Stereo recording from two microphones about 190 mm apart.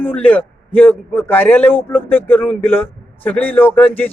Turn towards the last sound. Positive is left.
turn(degrees=10)  # may be behind; listen again after turning